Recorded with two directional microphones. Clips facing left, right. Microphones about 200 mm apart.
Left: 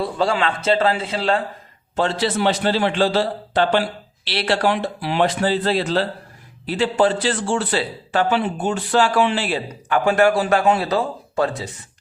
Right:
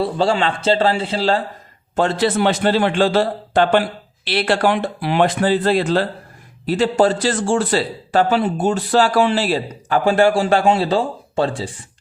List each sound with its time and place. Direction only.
0.0 s a man's voice: 30° right (ahead or behind)
2.0 s a man's voice: 50° right (ahead or behind); by 11.7 s 30° right (ahead or behind)